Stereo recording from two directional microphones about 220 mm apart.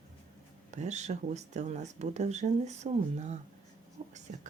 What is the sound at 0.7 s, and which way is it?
Speech, 30° right (ahead or behind).